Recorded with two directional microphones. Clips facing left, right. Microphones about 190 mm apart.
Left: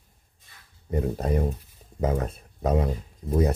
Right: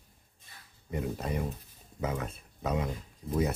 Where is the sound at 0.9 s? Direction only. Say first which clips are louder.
Left 7 dB; 40° left (ahead or behind).